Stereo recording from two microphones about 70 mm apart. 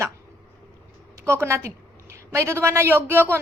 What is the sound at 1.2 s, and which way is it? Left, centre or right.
A woman's voice, right.